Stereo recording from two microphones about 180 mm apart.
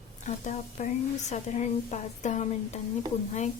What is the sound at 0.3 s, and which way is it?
A woman's voice, 40° left (ahead or behind).